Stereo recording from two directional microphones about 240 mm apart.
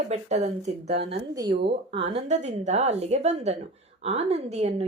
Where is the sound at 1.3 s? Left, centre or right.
Centre.